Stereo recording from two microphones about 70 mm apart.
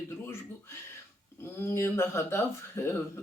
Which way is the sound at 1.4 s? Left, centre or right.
Left.